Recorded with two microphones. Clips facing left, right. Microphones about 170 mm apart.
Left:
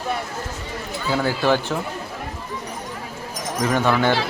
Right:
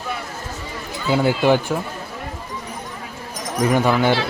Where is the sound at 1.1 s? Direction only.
15° right (ahead or behind).